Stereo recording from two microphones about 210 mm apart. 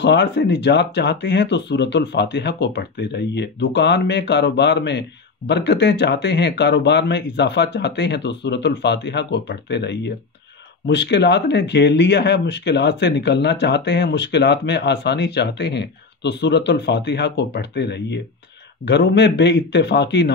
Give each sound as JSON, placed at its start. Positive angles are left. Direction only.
{"t": 0.0, "sound": "speech", "side_deg": 55}